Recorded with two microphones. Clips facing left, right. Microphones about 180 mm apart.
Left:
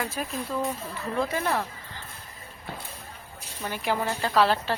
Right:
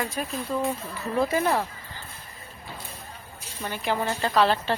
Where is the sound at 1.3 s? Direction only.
15° right (ahead or behind).